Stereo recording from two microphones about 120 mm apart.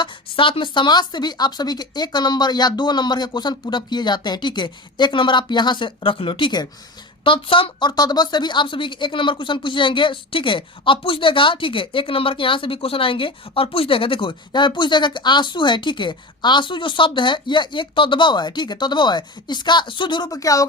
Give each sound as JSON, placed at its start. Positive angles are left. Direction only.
{"t": 0.0, "sound": "a woman's voice", "side_deg": 45}